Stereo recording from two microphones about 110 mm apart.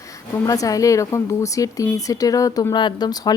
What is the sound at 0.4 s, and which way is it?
Speech, 30° left (ahead or behind).